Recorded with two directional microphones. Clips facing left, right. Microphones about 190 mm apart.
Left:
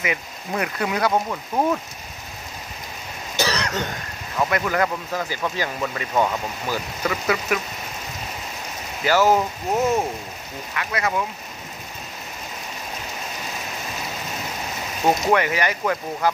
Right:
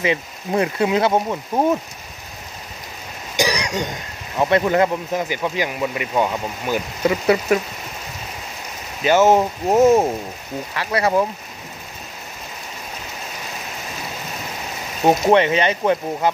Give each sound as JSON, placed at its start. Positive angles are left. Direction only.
{"t": 0.0, "sound": "speech", "side_deg": -30}
{"t": 3.3, "sound": "throat clearing", "side_deg": -15}
{"t": 4.4, "sound": "speech", "side_deg": -25}
{"t": 7.0, "sound": "speech", "side_deg": -25}
{"t": 9.0, "sound": "speech", "side_deg": -20}
{"t": 10.7, "sound": "speech", "side_deg": -30}
{"t": 15.0, "sound": "speech", "side_deg": -25}